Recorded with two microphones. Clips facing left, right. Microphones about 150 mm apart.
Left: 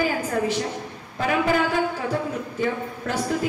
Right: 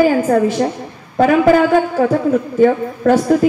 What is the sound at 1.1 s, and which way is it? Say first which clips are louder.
A woman's voice: right 11 dB; 65° right (ahead or behind).